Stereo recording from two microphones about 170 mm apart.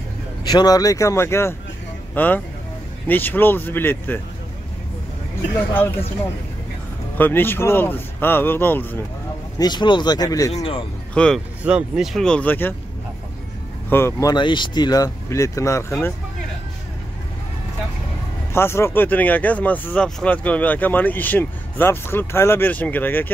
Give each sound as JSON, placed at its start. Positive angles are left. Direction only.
{"t": 0.5, "sound": "speech", "side_deg": 25}
{"t": 5.6, "sound": "speech", "side_deg": 10}
{"t": 7.2, "sound": "speech", "side_deg": 10}
{"t": 9.6, "sound": "speech", "side_deg": 25}
{"t": 10.5, "sound": "a man's voice", "side_deg": 35}
{"t": 11.1, "sound": "speech", "side_deg": 5}
{"t": 13.8, "sound": "speech", "side_deg": 15}
{"t": 14.3, "sound": "speech", "side_deg": 25}
{"t": 18.5, "sound": "speech", "side_deg": 15}